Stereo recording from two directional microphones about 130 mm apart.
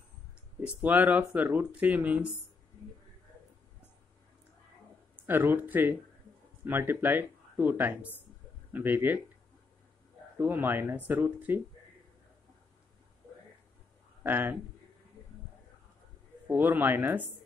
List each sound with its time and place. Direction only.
0.6 s speech: 10° right (ahead or behind)
5.2 s speech: 15° right (ahead or behind)
10.4 s speech: 15° right (ahead or behind)
14.2 s speech: 15° right (ahead or behind)
16.4 s speech: 15° right (ahead or behind)